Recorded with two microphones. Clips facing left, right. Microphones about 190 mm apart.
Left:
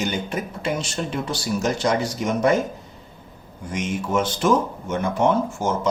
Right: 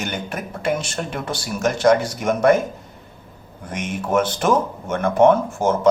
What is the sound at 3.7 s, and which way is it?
Speech, 55° right (ahead or behind).